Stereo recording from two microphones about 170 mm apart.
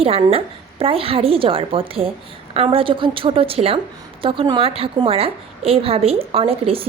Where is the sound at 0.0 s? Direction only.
35° right (ahead or behind).